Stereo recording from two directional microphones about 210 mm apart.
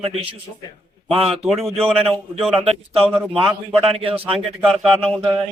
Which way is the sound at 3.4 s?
25° right (ahead or behind).